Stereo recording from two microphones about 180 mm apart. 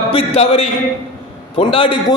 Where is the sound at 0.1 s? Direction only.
35° left (ahead or behind).